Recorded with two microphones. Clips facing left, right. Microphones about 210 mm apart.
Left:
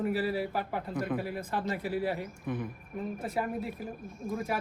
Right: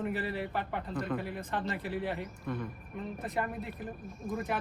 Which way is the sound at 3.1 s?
Centre (ahead or behind).